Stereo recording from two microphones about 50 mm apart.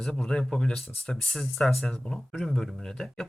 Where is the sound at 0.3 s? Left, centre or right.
Centre.